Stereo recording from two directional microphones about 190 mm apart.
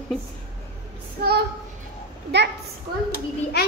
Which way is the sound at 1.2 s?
50° right (ahead or behind).